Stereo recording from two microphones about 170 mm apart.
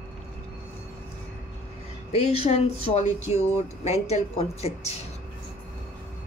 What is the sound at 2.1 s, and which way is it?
Speech, 40° left (ahead or behind).